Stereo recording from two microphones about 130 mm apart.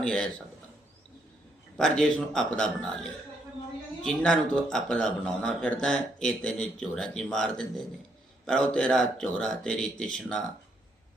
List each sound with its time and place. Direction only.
0.0 s speech: 5° left (ahead or behind)
1.8 s a man's voice: 5° left (ahead or behind)